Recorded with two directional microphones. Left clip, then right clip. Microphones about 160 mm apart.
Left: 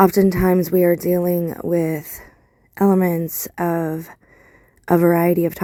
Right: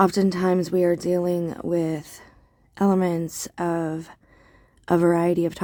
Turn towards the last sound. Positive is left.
turn(degrees=30)  # may be behind; listen again after turning